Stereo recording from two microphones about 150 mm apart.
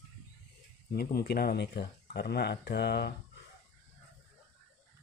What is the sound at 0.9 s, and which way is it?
Speech, 85° left.